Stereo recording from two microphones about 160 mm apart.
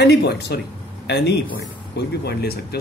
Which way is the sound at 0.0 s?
90° left.